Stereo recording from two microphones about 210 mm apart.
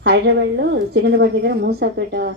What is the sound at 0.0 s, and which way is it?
A woman's voice, 55° right (ahead or behind).